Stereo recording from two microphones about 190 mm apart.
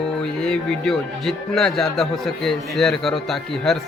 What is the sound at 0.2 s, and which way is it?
Speech, 5° left (ahead or behind).